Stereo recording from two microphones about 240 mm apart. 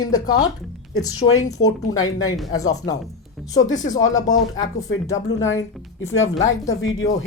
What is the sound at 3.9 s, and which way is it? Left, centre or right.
A woman's voice, left.